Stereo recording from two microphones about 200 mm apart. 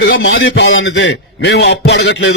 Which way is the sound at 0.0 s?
65° left (ahead or behind).